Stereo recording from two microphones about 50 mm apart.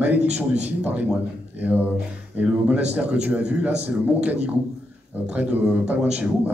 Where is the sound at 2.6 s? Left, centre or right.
Right.